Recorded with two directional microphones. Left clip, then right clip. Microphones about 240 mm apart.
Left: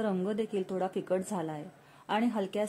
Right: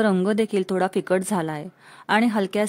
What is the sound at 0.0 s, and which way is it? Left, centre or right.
A woman's voice, right.